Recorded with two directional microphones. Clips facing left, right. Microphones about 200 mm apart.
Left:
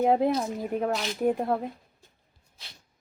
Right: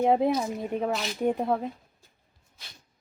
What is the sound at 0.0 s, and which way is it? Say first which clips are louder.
Speech: even; centre (ahead or behind).